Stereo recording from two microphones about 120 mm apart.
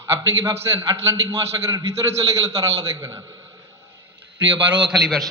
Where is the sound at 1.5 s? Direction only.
35° right (ahead or behind).